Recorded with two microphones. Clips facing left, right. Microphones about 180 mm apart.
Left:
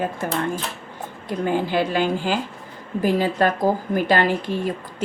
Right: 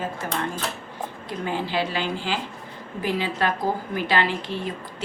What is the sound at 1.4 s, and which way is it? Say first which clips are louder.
Speech: left 5 dB; 50° left (ahead or behind).